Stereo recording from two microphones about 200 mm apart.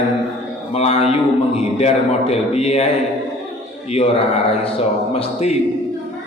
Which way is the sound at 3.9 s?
30° left (ahead or behind).